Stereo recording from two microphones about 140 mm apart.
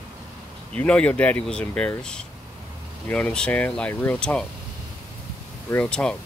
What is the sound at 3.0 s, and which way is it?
Speech, 10° left (ahead or behind).